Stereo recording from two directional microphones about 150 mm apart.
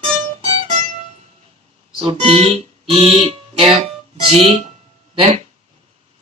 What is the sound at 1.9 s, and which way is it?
Speech, 35° right (ahead or behind).